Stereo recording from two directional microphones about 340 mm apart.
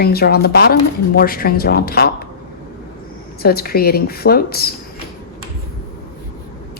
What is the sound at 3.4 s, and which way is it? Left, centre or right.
Speech, left.